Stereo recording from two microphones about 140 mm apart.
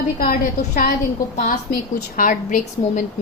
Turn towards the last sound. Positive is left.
turn(degrees=65)  # may be behind; listen again after turning